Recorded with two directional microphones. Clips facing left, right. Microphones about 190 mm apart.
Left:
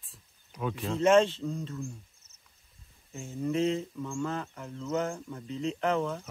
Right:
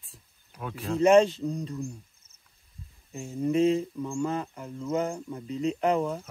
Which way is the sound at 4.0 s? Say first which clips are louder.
Right 4 dB; 15° right (ahead or behind).